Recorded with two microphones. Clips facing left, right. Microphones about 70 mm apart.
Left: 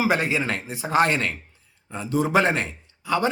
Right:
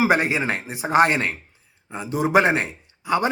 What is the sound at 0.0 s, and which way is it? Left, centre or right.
A man's voice, right.